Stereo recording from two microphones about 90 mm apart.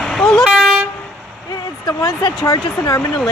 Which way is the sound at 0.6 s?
5° right (ahead or behind).